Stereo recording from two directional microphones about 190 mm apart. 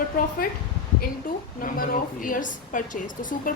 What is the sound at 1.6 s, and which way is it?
A woman's voice, 45° left (ahead or behind).